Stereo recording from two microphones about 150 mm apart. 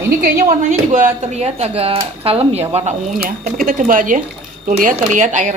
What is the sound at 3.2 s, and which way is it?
Speech, 65° right (ahead or behind).